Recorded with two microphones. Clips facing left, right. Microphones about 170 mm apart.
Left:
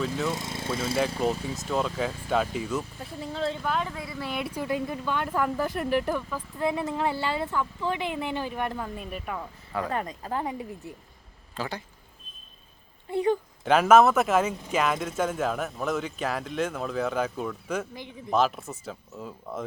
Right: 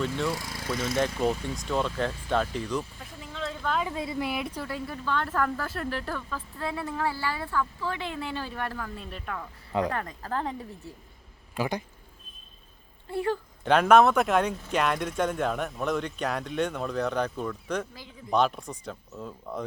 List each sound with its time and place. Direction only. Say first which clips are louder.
0.3 s speech: left 1 dB; 20° left (ahead or behind)
0.9 s speech: even; 5° left (ahead or behind)
3.2 s a sound: left 6 dB; 35° left (ahead or behind)
3.8 s speech: right 4 dB; 25° right (ahead or behind)
4.3 s speech: even; centre (ahead or behind)
4.5 s speech: left 5 dB; 20° left (ahead or behind)
11.5 s speech: right 4 dB; 15° right (ahead or behind)
13.1 s speech: left 4 dB; 20° left (ahead or behind)
13.7 s speech: left 1 dB; 5° left (ahead or behind)